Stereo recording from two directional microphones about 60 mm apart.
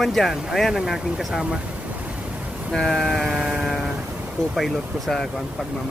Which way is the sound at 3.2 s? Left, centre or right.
Centre.